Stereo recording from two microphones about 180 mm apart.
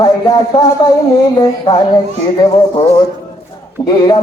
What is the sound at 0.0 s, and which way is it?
Male singing, 20° left (ahead or behind).